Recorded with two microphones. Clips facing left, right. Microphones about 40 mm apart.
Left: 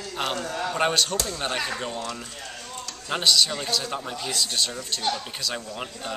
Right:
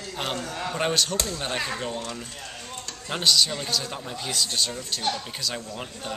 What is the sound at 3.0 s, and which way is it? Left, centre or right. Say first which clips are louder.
Speech: left 1 dB; centre.